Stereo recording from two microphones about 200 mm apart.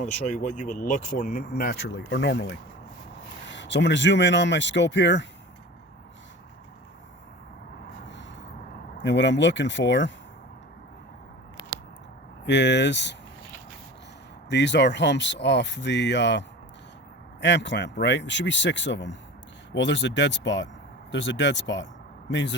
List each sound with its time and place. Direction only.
0.0 s speech: 40° left (ahead or behind); by 5.2 s 65° left (ahead or behind)
9.0 s speech: 65° left (ahead or behind)
12.5 s speech: 60° left (ahead or behind)
14.5 s speech: 60° left (ahead or behind)
17.4 s speech: 60° left (ahead or behind)